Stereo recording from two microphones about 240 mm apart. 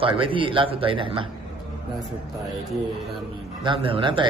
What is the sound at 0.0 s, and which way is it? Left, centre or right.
A man's voice, right.